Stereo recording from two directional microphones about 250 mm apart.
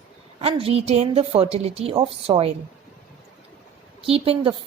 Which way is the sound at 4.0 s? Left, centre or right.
Right.